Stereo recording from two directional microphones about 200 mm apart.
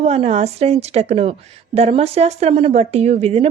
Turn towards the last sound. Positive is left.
turn(degrees=-30)  # may be behind; listen again after turning